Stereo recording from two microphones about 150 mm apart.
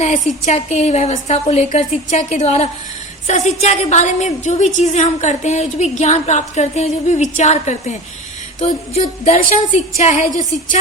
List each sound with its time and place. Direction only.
0.0 s a woman's voice: 50° left (ahead or behind)